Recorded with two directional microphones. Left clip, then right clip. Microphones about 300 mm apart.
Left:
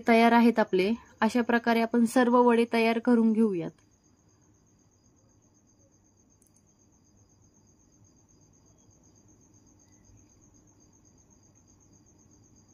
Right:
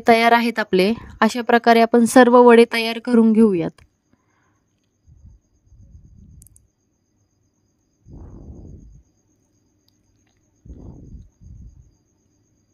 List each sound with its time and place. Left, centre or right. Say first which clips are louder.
0.0 s a woman's voice: right 8 dB; right